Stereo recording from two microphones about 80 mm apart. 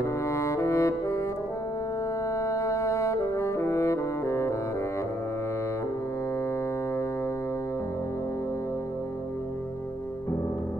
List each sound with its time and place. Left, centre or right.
0.0 s music: left
2.3 s music: left